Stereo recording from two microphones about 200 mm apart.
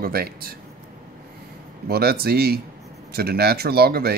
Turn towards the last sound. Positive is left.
turn(degrees=-50)  # may be behind; listen again after turning